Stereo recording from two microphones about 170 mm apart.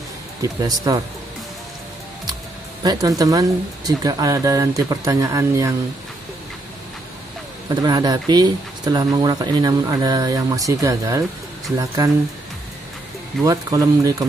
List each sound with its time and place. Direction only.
0.4 s speech: 20° right (ahead or behind)
2.8 s speech: 25° right (ahead or behind)
7.8 s speech: 20° right (ahead or behind)
13.4 s speech: 20° right (ahead or behind)